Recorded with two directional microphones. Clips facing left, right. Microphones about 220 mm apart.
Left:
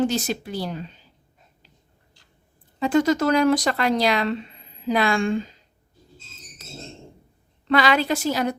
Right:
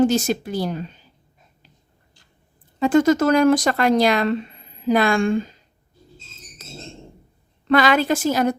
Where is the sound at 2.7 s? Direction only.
50° right (ahead or behind).